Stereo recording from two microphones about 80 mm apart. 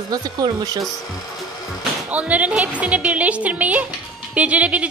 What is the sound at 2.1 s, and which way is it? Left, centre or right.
A woman's voice, centre.